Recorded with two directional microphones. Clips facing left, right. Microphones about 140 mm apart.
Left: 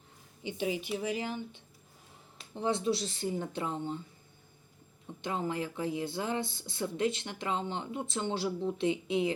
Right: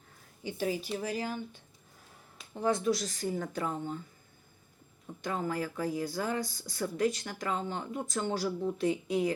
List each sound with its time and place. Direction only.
0.4 s speech: 20° left (ahead or behind)
0.9 s speech: 40° right (ahead or behind)
2.6 s speech: 25° left (ahead or behind)
5.2 s speech: 25° left (ahead or behind)